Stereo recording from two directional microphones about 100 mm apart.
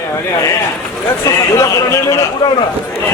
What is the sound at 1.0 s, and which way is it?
A man's voice, 30° left (ahead or behind).